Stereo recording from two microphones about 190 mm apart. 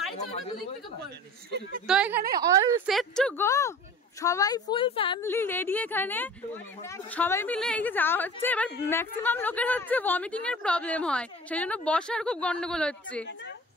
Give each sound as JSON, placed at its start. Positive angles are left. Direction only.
{"t": 1.9, "sound": "speech", "side_deg": -5}
{"t": 2.3, "sound": "a woman's voice", "side_deg": -20}
{"t": 2.9, "sound": "a woman's voice", "side_deg": 0}
{"t": 5.2, "sound": "speech", "side_deg": 10}
{"t": 13.2, "sound": "speech", "side_deg": 70}